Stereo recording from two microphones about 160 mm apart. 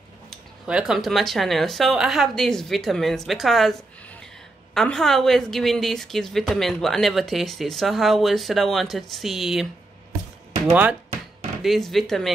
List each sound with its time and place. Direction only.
0.3 s a woman's voice: 5° right (ahead or behind)
10.7 s speech: 10° right (ahead or behind)
11.6 s a woman's voice: centre (ahead or behind)